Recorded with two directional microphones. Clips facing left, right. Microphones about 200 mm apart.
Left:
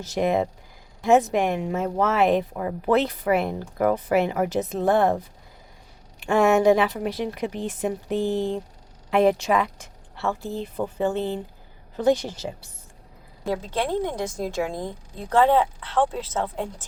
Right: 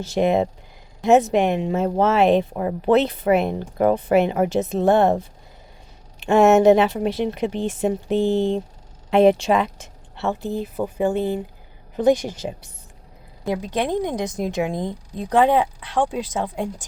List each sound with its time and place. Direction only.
0.0 s speech: 25° right (ahead or behind)
10.6 s a woman's voice: 10° right (ahead or behind)